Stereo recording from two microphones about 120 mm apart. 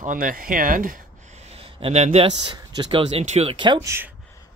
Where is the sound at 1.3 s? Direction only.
55° right (ahead or behind).